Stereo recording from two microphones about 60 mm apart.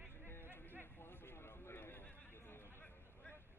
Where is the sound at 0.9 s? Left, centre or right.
Left.